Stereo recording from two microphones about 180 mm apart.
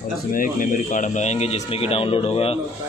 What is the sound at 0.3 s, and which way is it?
Speech, 50° left (ahead or behind).